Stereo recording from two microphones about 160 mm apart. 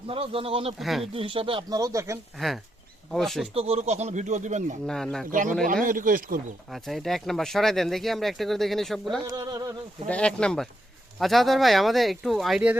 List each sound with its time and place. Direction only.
0.1 s speech: 35° right (ahead or behind)
0.8 s speech: centre (ahead or behind)
1.1 s speech: 35° right (ahead or behind)
1.8 s a sound: 20° right (ahead or behind)
3.1 s speech: centre (ahead or behind)
3.5 s speech: 40° right (ahead or behind)
4.9 s speech: 5° left (ahead or behind)
5.3 s speech: 55° right (ahead or behind)
6.7 s speech: centre (ahead or behind)
9.2 s a sound: 25° right (ahead or behind)
10.1 s speech: 5° left (ahead or behind)